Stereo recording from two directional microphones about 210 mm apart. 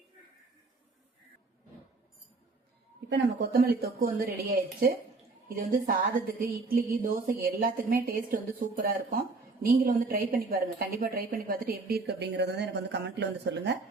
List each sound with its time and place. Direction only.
3.1 s a woman's voice: 50° right (ahead or behind)